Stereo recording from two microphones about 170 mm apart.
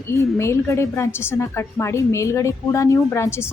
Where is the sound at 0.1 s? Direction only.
15° left (ahead or behind).